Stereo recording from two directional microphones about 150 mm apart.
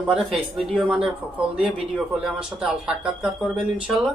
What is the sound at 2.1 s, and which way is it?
Speech, 5° right (ahead or behind).